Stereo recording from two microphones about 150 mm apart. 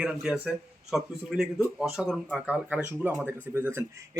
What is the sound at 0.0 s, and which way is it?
Speech, 5° right (ahead or behind).